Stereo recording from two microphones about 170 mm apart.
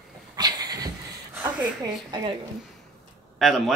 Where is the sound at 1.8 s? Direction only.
25° right (ahead or behind).